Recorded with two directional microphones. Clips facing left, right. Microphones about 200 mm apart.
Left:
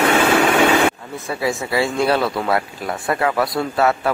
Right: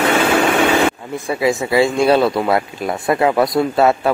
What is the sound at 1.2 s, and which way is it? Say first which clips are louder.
A man's voice: right 5 dB; 15° right (ahead or behind).